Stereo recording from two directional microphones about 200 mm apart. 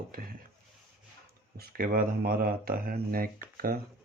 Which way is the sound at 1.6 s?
50° right (ahead or behind).